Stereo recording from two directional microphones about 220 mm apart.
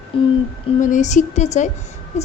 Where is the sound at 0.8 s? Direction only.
35° left (ahead or behind).